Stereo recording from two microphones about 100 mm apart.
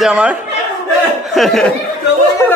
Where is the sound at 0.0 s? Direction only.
10° right (ahead or behind).